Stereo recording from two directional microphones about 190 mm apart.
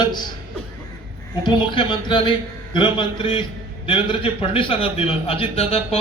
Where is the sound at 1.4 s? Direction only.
25° left (ahead or behind).